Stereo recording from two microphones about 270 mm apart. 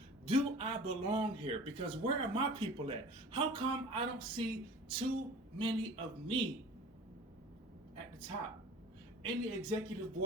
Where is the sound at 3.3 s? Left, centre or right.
Centre.